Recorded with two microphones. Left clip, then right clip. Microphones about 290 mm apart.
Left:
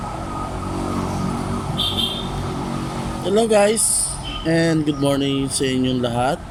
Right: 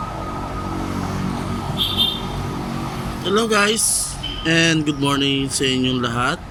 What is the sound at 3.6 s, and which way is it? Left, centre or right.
Speech, right.